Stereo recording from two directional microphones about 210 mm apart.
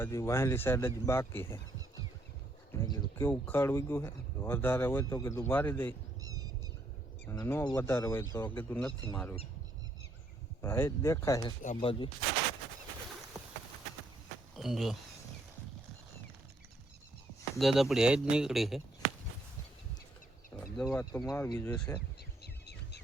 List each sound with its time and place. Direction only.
0.0 s speech: 15° left (ahead or behind)
2.7 s speech: 20° left (ahead or behind)
7.3 s speech: 10° left (ahead or behind)
10.6 s speech: 10° left (ahead or behind)
11.6 s speech: 30° left (ahead or behind)
14.5 s speech: centre (ahead or behind)
17.6 s speech: centre (ahead or behind)
20.7 s speech: centre (ahead or behind)